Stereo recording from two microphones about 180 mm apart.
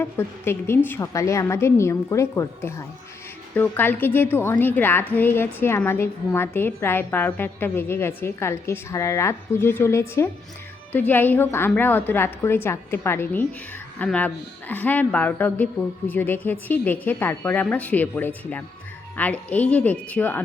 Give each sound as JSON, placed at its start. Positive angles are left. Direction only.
{"t": 0.0, "sound": "a woman's voice", "side_deg": 15}